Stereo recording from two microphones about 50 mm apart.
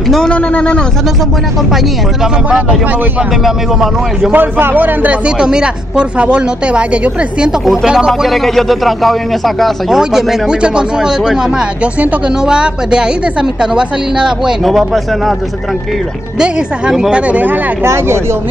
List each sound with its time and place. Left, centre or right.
0.3 s speech: left
3.4 s a man's voice: centre
4.3 s a man's voice: right
5.2 s a woman's voice: centre
8.2 s a man's voice: centre
9.8 s a woman's voice: centre
14.6 s a man's voice: centre
16.3 s a woman's voice: centre
17.1 s a man's voice: right
17.8 s speech: right